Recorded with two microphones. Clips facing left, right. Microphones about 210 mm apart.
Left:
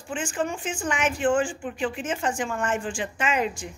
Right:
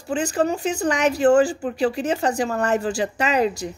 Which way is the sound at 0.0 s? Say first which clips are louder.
Right 7 dB; 40° right (ahead or behind).